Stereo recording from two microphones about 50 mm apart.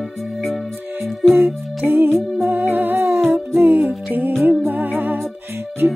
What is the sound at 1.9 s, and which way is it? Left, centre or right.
Music, right.